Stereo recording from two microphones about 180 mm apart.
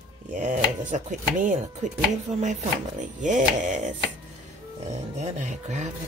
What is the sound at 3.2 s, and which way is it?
Speech, 45° right (ahead or behind).